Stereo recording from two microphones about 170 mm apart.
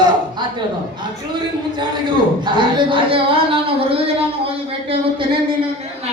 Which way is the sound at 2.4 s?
30° right (ahead or behind).